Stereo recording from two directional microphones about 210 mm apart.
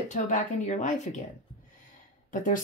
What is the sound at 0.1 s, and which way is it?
Speech, 35° left (ahead or behind).